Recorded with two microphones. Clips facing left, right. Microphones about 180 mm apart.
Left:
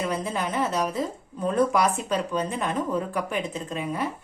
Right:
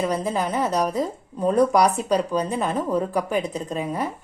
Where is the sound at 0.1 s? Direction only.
35° right (ahead or behind).